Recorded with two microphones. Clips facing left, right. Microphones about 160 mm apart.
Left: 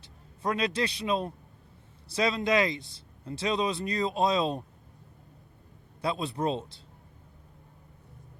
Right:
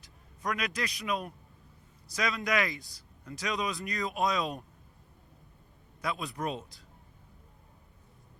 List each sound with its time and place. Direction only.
0.0 s a man's voice: 30° left (ahead or behind)
6.0 s speech: 30° left (ahead or behind)